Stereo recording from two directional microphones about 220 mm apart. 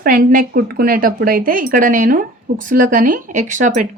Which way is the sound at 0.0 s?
40° right (ahead or behind).